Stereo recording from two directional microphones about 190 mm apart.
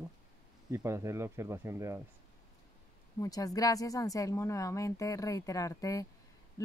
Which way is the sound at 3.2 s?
20° left (ahead or behind).